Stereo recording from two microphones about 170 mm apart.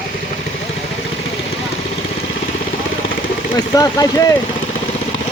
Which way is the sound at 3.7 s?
20° left (ahead or behind).